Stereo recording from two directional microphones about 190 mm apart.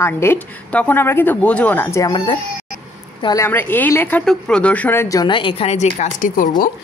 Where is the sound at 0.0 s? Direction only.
10° left (ahead or behind).